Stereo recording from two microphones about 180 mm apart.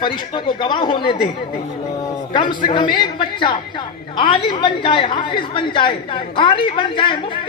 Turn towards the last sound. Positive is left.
turn(degrees=30)  # may be behind; listen again after turning